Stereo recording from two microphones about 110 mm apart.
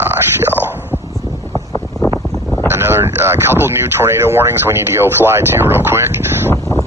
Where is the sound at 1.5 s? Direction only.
10° left (ahead or behind).